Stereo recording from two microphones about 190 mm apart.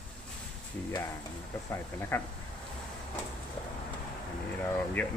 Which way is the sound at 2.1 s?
10° left (ahead or behind).